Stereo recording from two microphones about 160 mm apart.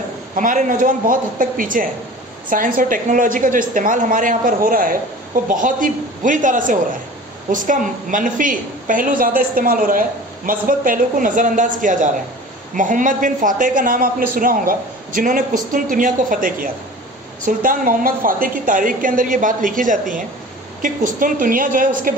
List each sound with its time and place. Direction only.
0.4 s a woman's voice: 55° right (ahead or behind)